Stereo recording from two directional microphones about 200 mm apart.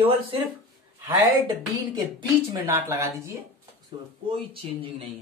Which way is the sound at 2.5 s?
15° right (ahead or behind).